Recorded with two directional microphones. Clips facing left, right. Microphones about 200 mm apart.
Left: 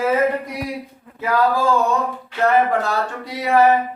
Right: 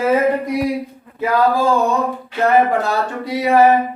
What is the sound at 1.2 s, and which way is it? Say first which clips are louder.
Speech: right 3 dB; 15° right (ahead or behind).